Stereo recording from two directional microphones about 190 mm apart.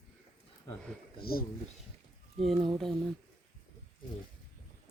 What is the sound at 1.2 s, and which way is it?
Speech, 50° left (ahead or behind).